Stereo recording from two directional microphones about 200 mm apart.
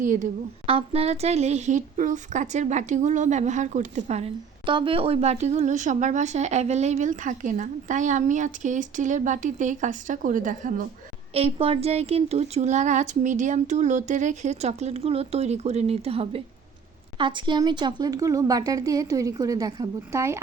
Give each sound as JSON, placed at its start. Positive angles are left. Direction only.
{"t": 0.0, "sound": "speech", "side_deg": -40}
{"t": 0.7, "sound": "speech", "side_deg": -30}
{"t": 11.3, "sound": "speech", "side_deg": -30}